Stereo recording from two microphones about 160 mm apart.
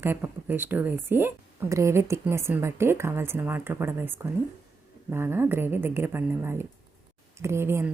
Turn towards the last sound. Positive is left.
turn(degrees=-15)  # may be behind; listen again after turning